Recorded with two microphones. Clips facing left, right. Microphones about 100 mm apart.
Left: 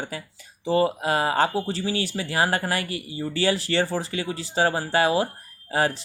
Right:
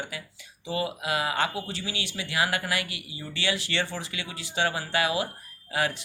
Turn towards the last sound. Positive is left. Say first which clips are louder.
# left 5 dB
turn(degrees=35)  # may be behind; listen again after turning